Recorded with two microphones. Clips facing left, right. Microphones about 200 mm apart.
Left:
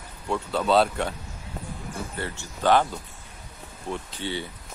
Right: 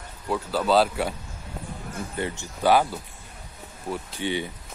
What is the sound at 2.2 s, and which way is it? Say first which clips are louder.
Speech: right 3 dB; 10° right (ahead or behind).